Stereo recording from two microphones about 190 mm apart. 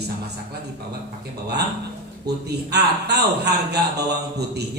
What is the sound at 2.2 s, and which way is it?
A man's voice, 60° right (ahead or behind).